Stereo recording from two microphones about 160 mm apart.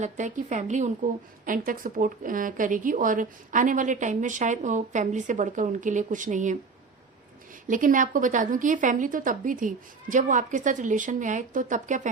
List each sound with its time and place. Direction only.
0.0 s speech: 50° right (ahead or behind)
7.7 s speech: 55° right (ahead or behind)